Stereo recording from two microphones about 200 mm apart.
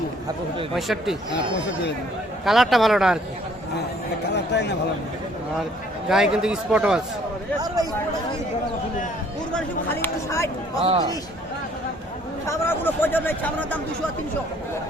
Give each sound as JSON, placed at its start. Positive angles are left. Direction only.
{"t": 0.8, "sound": "a man's voice", "side_deg": 0}
{"t": 2.4, "sound": "a man's voice", "side_deg": 0}
{"t": 4.5, "sound": "speech", "side_deg": 60}
{"t": 6.1, "sound": "a man's voice", "side_deg": -5}
{"t": 9.5, "sound": "speech", "side_deg": 5}
{"t": 10.8, "sound": "a man's voice", "side_deg": -20}
{"t": 12.5, "sound": "speech", "side_deg": 10}